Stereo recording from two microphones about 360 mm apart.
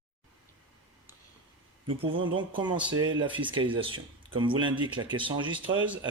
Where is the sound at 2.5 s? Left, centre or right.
Centre.